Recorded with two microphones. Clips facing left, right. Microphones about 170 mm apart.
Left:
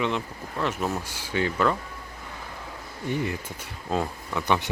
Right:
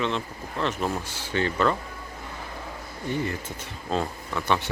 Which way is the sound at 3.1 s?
15° left (ahead or behind).